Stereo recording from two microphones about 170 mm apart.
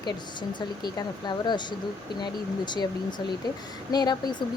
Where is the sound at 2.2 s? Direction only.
25° left (ahead or behind).